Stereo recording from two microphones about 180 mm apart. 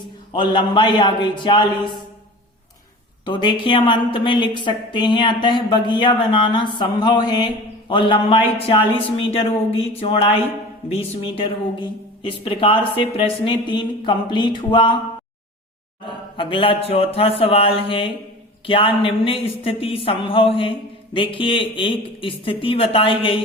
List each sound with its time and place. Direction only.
0.3 s a woman's voice: 25° left (ahead or behind)
3.2 s a woman's voice: 25° left (ahead or behind)
16.4 s a woman's voice: 30° left (ahead or behind)